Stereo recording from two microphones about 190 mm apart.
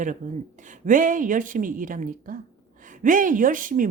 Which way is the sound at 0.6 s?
45° right (ahead or behind).